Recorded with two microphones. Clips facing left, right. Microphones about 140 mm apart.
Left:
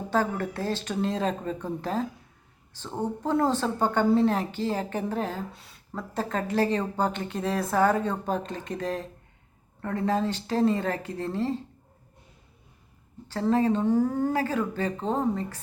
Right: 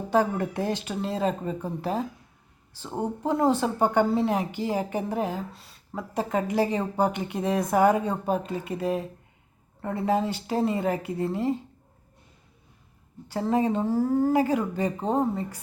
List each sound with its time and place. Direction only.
0.1 s a woman's voice: 15° right (ahead or behind)
5.5 s speech: centre (ahead or behind)
5.9 s a woman's voice: 10° right (ahead or behind)
13.2 s a woman's voice: 10° right (ahead or behind)